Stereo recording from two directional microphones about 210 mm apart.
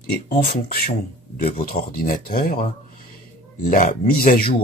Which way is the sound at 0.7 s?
45° left (ahead or behind).